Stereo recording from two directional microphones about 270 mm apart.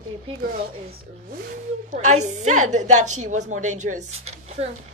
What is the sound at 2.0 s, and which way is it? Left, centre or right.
Speech, right.